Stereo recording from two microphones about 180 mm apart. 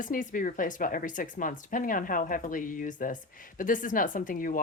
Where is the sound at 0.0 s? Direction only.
45° left (ahead or behind).